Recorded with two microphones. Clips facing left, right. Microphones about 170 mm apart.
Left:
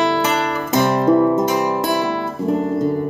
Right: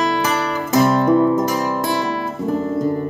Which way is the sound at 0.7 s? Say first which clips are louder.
Right 1 dB; 25° left (ahead or behind).